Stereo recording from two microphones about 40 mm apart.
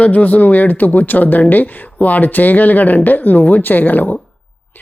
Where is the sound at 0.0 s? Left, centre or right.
Left.